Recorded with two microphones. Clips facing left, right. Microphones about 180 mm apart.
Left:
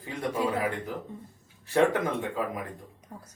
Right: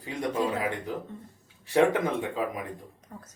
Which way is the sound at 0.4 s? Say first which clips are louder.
Even; 10° left (ahead or behind).